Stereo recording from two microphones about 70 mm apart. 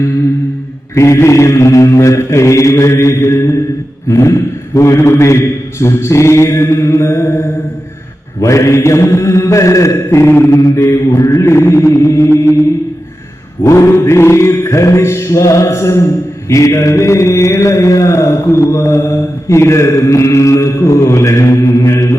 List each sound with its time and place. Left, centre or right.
0.9 s mantra: left
10.5 s mantra: left
11.3 s music: left
13.7 s mantra: left